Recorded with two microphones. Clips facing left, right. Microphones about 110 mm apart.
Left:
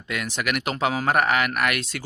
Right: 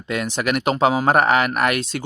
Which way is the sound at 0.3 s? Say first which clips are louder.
Right 7 dB; 30° right (ahead or behind).